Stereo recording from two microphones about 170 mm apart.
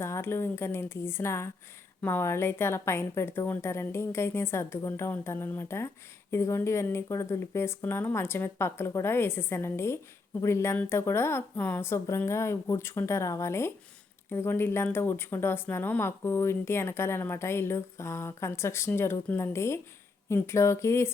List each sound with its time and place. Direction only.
0.0 s speech: 15° left (ahead or behind)